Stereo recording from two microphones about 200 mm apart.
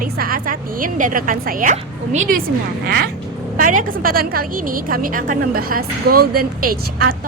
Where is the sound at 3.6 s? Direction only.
40° right (ahead or behind).